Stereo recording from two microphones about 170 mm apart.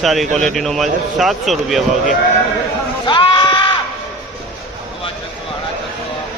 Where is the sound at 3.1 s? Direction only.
30° left (ahead or behind).